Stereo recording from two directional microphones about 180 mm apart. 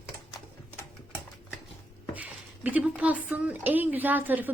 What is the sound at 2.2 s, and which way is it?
A woman's voice, 10° right (ahead or behind).